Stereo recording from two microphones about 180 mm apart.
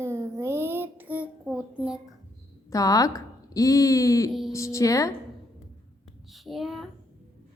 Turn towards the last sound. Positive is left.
turn(degrees=0)  # may be behind; listen again after turning